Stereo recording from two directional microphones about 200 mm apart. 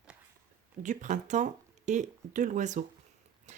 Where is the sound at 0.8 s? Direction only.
40° right (ahead or behind).